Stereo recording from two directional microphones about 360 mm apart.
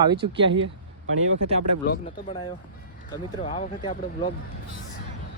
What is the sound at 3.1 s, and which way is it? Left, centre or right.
Speech, centre.